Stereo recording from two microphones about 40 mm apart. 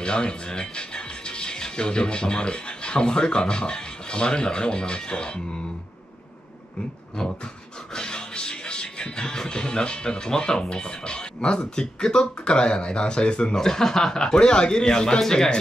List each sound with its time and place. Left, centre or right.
0.0 s speech: left
7.2 s dog: centre
7.9 s speech: left
13.7 s a man's voice: centre